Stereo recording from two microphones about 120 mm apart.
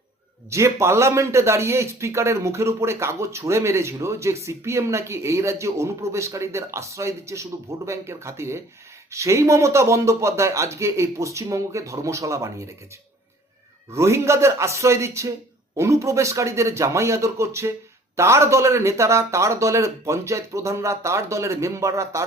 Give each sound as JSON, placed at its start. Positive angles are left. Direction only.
{"t": 0.5, "sound": "speech", "side_deg": -25}
{"t": 13.9, "sound": "speech", "side_deg": -25}